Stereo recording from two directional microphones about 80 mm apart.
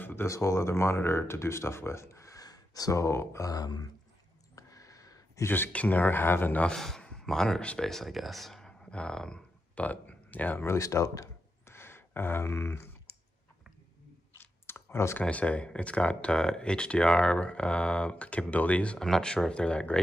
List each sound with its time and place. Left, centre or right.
0.0 s speech: left
4.6 s a sound: left
5.4 s speech: left
6.6 s speech: centre; by 10.7 s left
10.7 s a sound: left
14.4 s clicking: left
15.2 s speech: centre